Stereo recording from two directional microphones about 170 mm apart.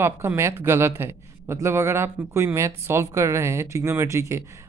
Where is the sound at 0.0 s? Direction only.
15° right (ahead or behind).